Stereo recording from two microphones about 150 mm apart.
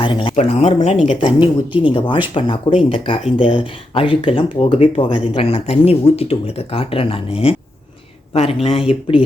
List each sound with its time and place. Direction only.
0.0 s speech: 35° left (ahead or behind)
0.3 s speech: 50° left (ahead or behind)
1.0 s speech: 35° left (ahead or behind)